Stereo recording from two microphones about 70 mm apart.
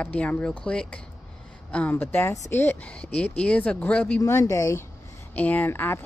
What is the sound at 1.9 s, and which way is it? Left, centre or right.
Speech, left.